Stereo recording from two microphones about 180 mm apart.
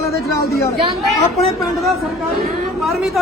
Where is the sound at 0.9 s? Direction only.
Centre (ahead or behind).